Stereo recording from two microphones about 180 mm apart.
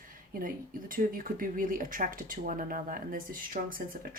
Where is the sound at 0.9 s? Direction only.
50° right (ahead or behind).